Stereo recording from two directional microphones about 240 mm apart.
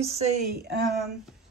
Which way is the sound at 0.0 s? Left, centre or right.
Right.